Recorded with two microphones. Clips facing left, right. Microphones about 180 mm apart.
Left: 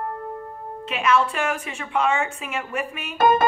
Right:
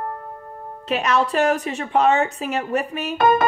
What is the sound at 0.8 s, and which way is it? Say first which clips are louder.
Music: right 1 dB; 35° right (ahead or behind).